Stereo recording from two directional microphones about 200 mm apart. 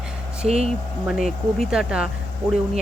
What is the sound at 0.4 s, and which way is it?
Speech, 30° right (ahead or behind).